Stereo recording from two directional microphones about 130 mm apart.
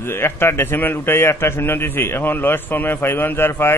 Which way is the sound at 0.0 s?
20° left (ahead or behind).